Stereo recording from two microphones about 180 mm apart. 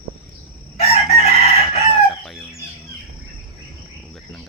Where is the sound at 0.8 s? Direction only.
35° left (ahead or behind).